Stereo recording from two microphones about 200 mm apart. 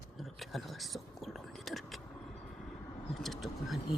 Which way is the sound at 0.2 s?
Centre (ahead or behind).